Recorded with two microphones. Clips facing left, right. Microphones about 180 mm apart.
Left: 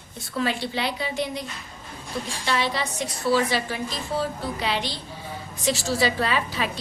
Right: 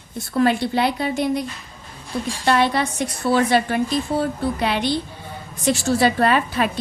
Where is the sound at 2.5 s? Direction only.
55° right (ahead or behind).